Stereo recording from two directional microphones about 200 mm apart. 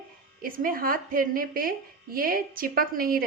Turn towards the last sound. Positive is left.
turn(degrees=-45)  # may be behind; listen again after turning